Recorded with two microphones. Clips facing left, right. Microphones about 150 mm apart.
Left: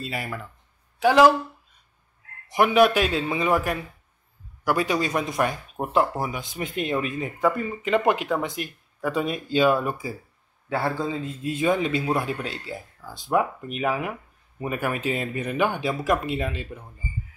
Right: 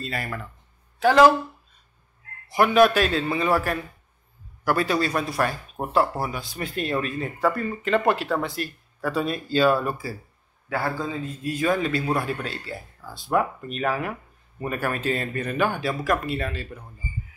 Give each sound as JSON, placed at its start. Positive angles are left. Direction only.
{"t": 0.0, "sound": "speech", "side_deg": 10}
{"t": 2.4, "sound": "a man's voice", "side_deg": 15}